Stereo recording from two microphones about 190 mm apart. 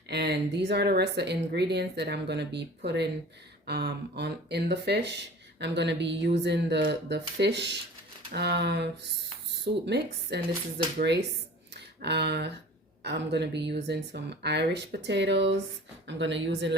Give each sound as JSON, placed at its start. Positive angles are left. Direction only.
{"t": 0.1, "sound": "speech", "side_deg": -60}
{"t": 11.7, "sound": "a sound", "side_deg": -60}
{"t": 13.0, "sound": "speech", "side_deg": -60}